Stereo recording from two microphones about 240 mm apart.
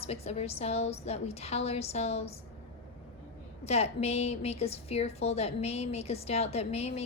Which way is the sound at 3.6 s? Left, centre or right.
Left.